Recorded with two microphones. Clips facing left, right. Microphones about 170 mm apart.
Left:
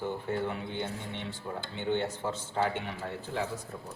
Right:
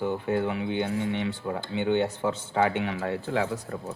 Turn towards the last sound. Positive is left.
turn(degrees=-90)